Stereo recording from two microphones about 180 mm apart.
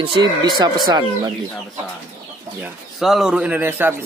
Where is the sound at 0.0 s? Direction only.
25° right (ahead or behind).